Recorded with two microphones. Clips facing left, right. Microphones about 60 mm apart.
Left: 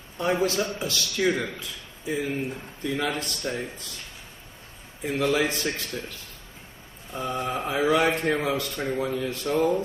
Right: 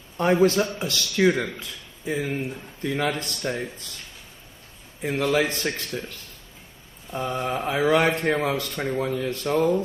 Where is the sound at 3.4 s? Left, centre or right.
Right.